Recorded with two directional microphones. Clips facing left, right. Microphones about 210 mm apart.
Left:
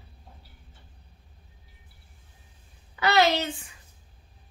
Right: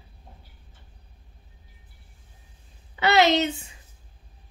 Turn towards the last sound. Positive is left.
turn(degrees=-20)  # may be behind; listen again after turning